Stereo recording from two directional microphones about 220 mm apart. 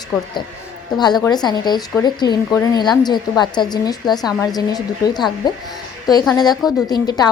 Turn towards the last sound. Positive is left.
turn(degrees=20)  # may be behind; listen again after turning